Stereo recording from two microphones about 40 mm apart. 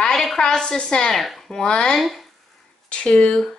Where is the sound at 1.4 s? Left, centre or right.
Centre.